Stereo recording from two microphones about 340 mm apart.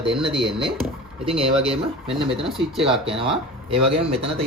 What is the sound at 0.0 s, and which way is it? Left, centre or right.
Speech, centre.